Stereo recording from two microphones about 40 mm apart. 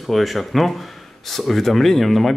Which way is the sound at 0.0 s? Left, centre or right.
Centre.